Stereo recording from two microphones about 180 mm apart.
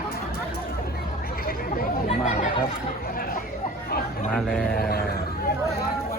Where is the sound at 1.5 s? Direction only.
55° left (ahead or behind).